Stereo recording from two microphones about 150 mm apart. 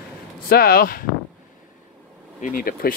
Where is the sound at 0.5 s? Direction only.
85° left.